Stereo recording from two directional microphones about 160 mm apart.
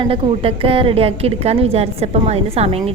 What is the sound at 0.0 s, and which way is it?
A woman's voice, 35° right (ahead or behind).